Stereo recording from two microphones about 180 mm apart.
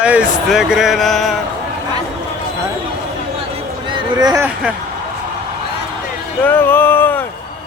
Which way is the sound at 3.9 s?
25° right (ahead or behind).